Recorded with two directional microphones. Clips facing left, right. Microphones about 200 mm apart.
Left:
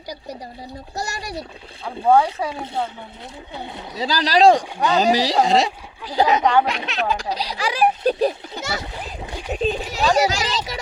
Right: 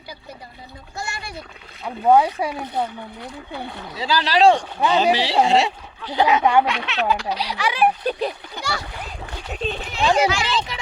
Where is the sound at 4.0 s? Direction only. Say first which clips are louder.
Left 1 dB; 40° left (ahead or behind).